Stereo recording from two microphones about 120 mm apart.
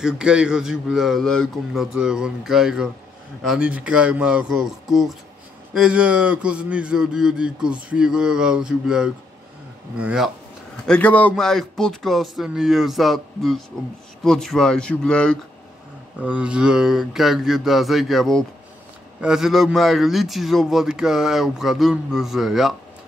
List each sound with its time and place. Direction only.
0.0 s a man's voice: 5° right (ahead or behind)
3.4 s a sound: 10° right (ahead or behind)
10.9 s a man's voice: 10° left (ahead or behind)
16.2 s a man's voice: 10° right (ahead or behind)